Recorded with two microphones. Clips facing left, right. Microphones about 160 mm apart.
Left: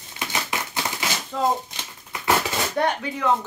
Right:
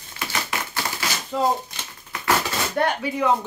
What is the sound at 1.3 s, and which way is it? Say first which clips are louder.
Speech: right 2 dB; 10° right (ahead or behind).